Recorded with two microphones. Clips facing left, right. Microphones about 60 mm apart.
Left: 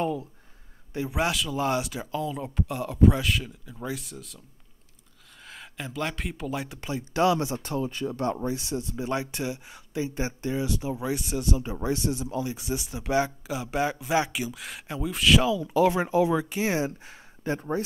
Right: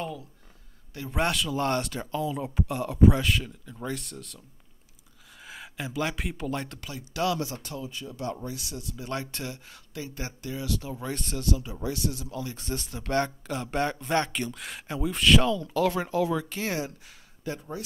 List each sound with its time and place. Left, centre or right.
0.0 s speech: left
1.1 s speech: centre
5.4 s speech: centre
6.8 s speech: left
7.7 s speech: left
9.1 s speech: centre
11.6 s speech: left
17.6 s speech: left